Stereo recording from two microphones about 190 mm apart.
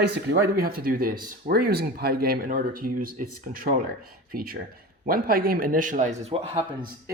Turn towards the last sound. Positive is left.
turn(degrees=-30)  # may be behind; listen again after turning